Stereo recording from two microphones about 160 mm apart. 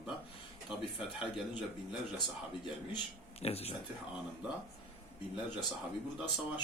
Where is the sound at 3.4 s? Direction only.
40° left (ahead or behind).